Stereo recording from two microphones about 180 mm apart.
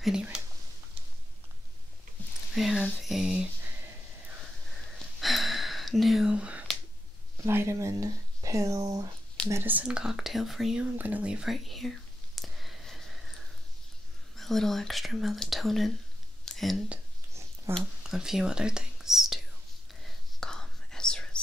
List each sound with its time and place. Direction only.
0.0 s speech: 5° right (ahead or behind)
2.5 s speech: centre (ahead or behind)
4.9 s whispering: centre (ahead or behind)
7.4 s speech: 15° right (ahead or behind)
12.4 s a sound: centre (ahead or behind)
14.3 s speech: centre (ahead or behind)
20.0 s whispering: centre (ahead or behind)